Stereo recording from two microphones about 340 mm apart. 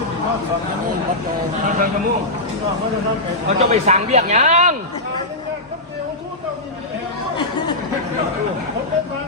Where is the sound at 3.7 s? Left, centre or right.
Centre.